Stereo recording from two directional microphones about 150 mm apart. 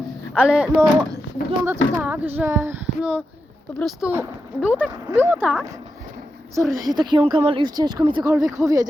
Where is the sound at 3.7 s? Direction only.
Centre (ahead or behind).